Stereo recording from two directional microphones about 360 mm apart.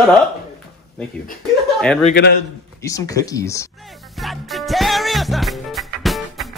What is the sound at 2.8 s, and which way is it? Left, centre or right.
Speech, centre.